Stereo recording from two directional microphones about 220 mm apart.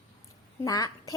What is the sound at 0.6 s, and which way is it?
Speech, 15° left (ahead or behind).